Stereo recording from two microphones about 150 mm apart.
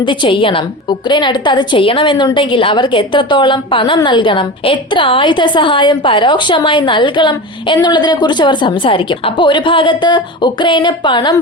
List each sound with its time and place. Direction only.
0.0 s a woman's voice: 30° left (ahead or behind)